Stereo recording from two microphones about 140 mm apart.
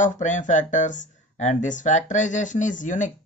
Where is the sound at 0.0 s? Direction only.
60° left (ahead or behind).